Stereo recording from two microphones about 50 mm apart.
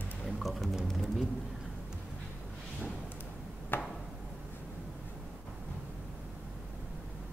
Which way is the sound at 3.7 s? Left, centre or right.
Left.